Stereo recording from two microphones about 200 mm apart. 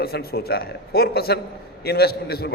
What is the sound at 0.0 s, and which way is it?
A man's voice, 50° left (ahead or behind).